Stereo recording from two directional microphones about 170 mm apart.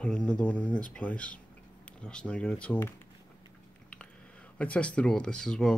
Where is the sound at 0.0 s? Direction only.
5° left (ahead or behind).